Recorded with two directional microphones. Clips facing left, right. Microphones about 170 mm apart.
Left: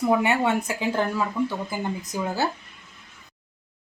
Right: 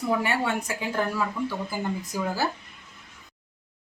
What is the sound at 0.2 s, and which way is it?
A woman's voice, 20° left (ahead or behind).